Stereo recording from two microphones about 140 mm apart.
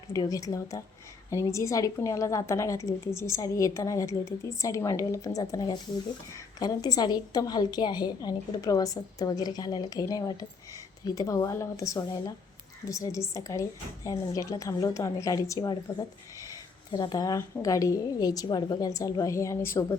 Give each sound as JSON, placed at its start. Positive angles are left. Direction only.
{"t": 0.1, "sound": "a woman's voice", "side_deg": 25}